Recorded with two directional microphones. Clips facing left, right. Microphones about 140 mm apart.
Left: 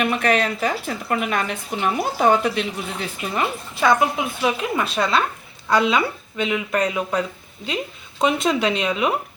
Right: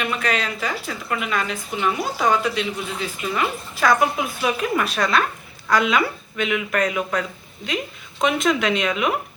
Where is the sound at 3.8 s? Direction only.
20° left (ahead or behind).